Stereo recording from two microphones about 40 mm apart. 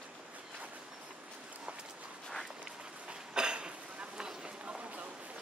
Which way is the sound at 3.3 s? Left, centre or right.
Right.